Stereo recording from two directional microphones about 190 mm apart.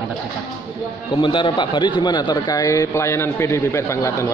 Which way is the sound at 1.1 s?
25° left (ahead or behind).